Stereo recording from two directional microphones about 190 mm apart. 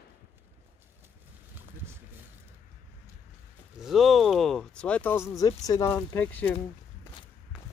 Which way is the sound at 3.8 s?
Centre (ahead or behind).